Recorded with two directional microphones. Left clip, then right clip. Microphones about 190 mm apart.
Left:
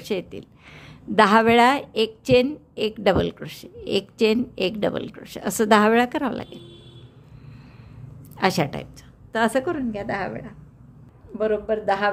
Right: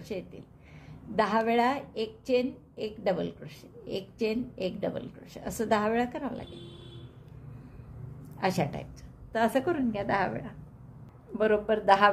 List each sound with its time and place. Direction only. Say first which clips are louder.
0.0 s speech: left 10 dB; 40° left (ahead or behind)
8.4 s a woman's voice: left 8 dB; 35° left (ahead or behind)
9.8 s a woman's voice: left 1 dB; 15° left (ahead or behind)
11.3 s a man's voice: left 3 dB; centre (ahead or behind)